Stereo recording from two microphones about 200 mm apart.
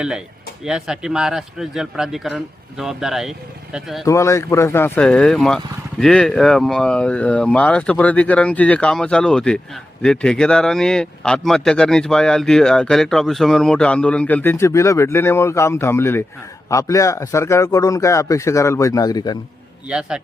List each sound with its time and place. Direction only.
0.6 s speech: 5° right (ahead or behind)
4.0 s a man's voice: 15° left (ahead or behind)
19.9 s speech: 5° right (ahead or behind)